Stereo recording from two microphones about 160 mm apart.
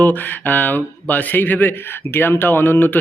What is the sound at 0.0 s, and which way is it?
Speech, 10° left (ahead or behind).